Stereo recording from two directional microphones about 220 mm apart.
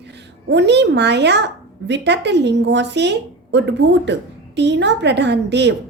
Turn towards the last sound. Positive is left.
turn(degrees=-50)  # may be behind; listen again after turning